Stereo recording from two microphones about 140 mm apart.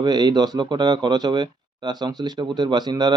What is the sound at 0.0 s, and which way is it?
Speech, 30° right (ahead or behind).